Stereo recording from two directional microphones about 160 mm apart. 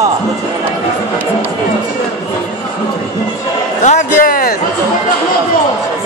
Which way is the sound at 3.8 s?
55° left (ahead or behind).